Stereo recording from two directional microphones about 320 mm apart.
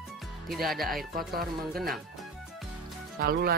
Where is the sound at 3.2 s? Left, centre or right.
Right.